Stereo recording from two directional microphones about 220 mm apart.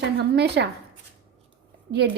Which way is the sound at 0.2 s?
50° right (ahead or behind).